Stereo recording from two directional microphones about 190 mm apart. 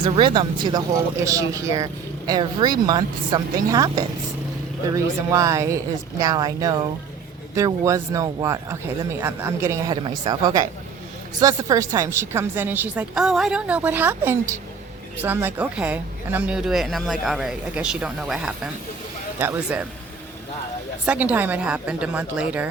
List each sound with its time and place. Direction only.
0.0 s speech: 25° right (ahead or behind)
5.3 s a woman's voice: 15° right (ahead or behind)
21.0 s a woman's voice: 10° right (ahead or behind)